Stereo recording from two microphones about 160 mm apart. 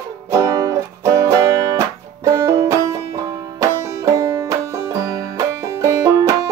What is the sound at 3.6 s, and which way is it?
Banjo, 20° right (ahead or behind).